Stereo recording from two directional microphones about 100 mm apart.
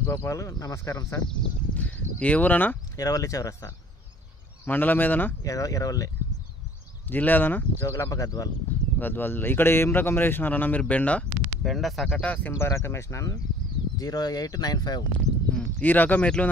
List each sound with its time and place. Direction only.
0.0 s speech: 30° left (ahead or behind)
1.4 s speech: 15° left (ahead or behind)
3.0 s speech: 35° left (ahead or behind)
4.6 s speech: 20° left (ahead or behind)
5.4 s speech: 35° left (ahead or behind)
7.1 s speech: 20° left (ahead or behind)
7.8 s speech: 35° left (ahead or behind)
9.0 s speech: 20° left (ahead or behind)
11.6 s speech: centre (ahead or behind)
12.2 s speech: 15° left (ahead or behind)
12.5 s speech: 25° left (ahead or behind); by 15.0 s 45° left (ahead or behind)
15.5 s speech: 15° left (ahead or behind)